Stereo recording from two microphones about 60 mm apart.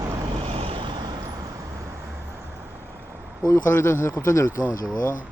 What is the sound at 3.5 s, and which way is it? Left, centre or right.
Speech, left.